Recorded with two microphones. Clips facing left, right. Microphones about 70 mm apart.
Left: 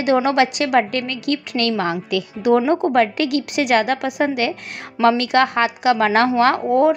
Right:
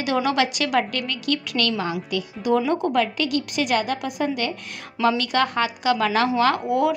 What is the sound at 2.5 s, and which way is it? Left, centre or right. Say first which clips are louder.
A woman's voice: left 4 dB; left.